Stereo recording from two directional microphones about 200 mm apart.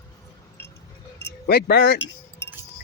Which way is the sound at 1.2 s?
55° left (ahead or behind).